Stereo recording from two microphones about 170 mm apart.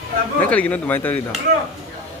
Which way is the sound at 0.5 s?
10° left (ahead or behind).